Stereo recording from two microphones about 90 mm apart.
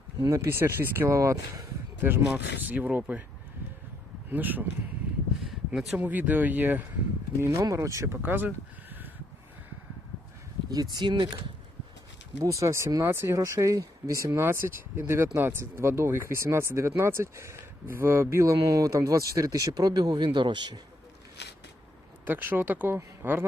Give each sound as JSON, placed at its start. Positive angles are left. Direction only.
{"t": 0.2, "sound": "speech", "side_deg": -35}
{"t": 2.0, "sound": "speech", "side_deg": -25}
{"t": 4.3, "sound": "speech", "side_deg": -20}
{"t": 5.5, "sound": "a sound", "side_deg": -5}
{"t": 6.0, "sound": "speech", "side_deg": -20}
{"t": 7.4, "sound": "speech", "side_deg": -35}
{"t": 10.9, "sound": "speech", "side_deg": -55}
{"t": 12.4, "sound": "speech", "side_deg": -35}
{"t": 22.3, "sound": "speech", "side_deg": -20}